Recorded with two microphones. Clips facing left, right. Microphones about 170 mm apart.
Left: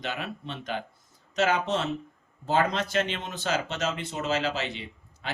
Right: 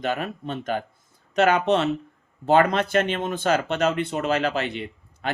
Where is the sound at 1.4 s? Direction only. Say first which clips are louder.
Right 6 dB; 60° right (ahead or behind).